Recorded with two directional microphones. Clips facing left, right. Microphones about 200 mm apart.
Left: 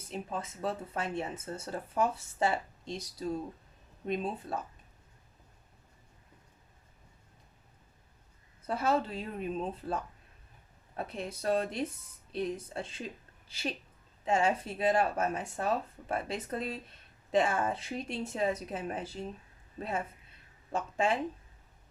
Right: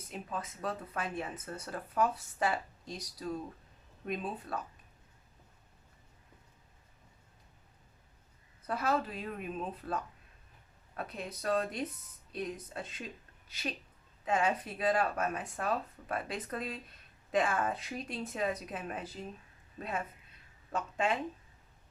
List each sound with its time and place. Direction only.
0.1 s speech: 25° left (ahead or behind)
8.6 s speech: 25° left (ahead or behind)
20.7 s speech: 30° left (ahead or behind)